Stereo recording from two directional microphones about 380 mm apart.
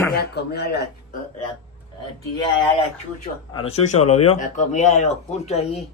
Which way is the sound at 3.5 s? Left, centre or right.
Centre.